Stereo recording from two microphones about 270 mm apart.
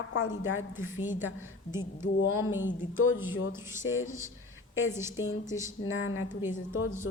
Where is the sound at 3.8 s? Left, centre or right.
Left.